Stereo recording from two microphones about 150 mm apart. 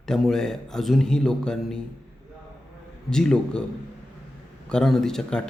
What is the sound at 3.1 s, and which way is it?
Speech, 5° left (ahead or behind).